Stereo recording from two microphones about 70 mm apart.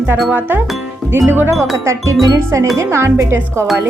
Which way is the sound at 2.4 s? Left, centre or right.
Right.